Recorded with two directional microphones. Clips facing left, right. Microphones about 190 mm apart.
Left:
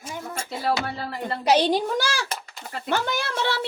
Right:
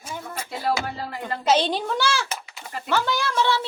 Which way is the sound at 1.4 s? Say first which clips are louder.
Left 2 dB; 15° left (ahead or behind).